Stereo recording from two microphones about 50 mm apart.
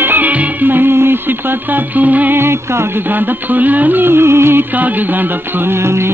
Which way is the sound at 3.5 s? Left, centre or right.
Right.